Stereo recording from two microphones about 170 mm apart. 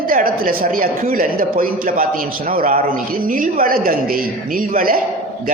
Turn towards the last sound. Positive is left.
turn(degrees=-55)  # may be behind; listen again after turning